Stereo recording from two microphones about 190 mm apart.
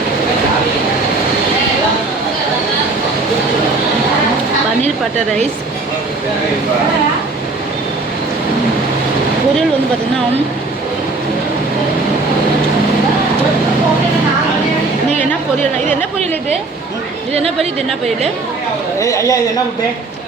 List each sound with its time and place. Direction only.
17.3 s a woman's voice: 30° right (ahead or behind)
18.9 s speech: 15° left (ahead or behind)